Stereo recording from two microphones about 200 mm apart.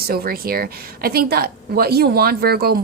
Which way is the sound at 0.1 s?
50° right (ahead or behind).